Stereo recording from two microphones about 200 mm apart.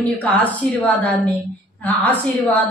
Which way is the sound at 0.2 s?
5° left (ahead or behind).